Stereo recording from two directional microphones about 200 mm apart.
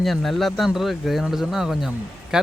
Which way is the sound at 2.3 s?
5° right (ahead or behind).